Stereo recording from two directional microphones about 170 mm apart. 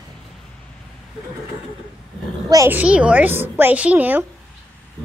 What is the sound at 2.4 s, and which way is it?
A woman's voice, 15° right (ahead or behind).